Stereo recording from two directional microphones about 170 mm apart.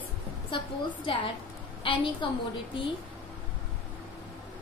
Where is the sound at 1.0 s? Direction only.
30° left (ahead or behind).